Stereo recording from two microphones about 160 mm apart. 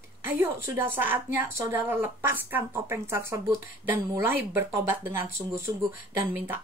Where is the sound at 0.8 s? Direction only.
15° right (ahead or behind).